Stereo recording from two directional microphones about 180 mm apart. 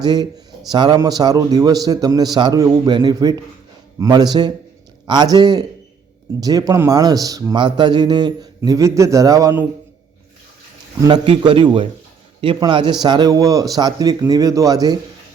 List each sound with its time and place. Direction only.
0.0 s a man's voice: 25° right (ahead or behind)
11.0 s a man's voice: 25° right (ahead or behind)